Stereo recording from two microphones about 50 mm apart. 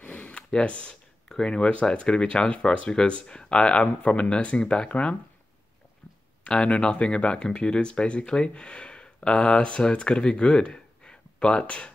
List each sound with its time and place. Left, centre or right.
0.0 s speech: left
6.4 s speech: left